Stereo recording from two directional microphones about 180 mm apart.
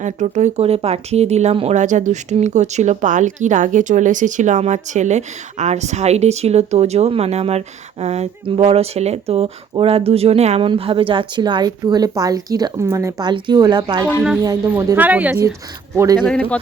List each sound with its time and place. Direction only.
0.0 s speech: 40° right (ahead or behind); by 15.5 s 10° right (ahead or behind)
16.0 s a man's voice: 20° right (ahead or behind)
16.2 s speech: 5° left (ahead or behind)